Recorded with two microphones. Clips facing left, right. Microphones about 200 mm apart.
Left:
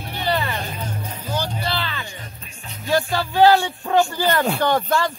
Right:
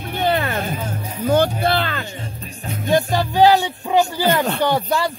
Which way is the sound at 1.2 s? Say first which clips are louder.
Right 11 dB; 55° right (ahead or behind).